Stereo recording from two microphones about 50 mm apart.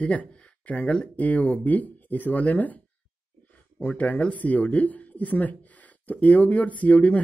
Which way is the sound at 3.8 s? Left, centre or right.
Left.